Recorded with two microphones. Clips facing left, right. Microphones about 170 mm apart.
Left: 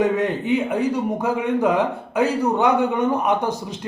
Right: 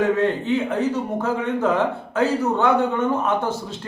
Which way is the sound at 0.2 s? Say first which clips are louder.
Even; 15° left (ahead or behind).